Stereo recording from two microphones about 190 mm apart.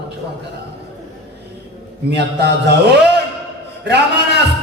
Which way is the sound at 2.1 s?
60° right (ahead or behind).